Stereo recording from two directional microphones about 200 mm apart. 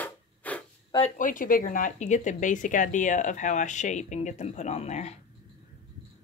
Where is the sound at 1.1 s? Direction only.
40° left (ahead or behind).